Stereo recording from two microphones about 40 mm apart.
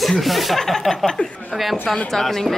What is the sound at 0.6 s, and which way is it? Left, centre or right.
Speech, centre.